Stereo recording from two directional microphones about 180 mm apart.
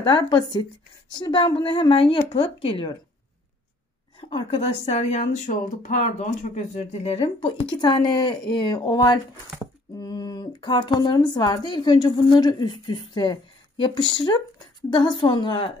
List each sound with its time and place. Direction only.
0.3 s speech: 25° left (ahead or behind)
4.2 s speech: 30° left (ahead or behind)